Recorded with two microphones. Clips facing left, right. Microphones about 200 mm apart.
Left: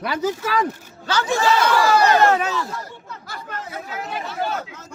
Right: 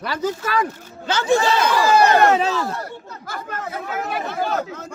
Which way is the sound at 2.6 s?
60° right (ahead or behind).